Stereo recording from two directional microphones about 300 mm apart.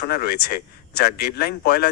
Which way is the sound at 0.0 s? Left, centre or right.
Left.